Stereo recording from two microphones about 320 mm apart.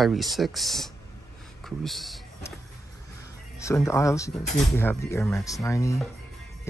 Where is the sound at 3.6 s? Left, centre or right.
Centre.